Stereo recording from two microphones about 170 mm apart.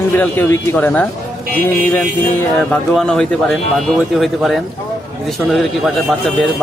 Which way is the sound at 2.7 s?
5° left (ahead or behind).